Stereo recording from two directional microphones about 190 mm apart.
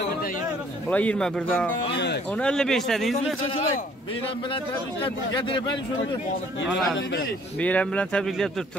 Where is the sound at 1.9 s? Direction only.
65° left (ahead or behind).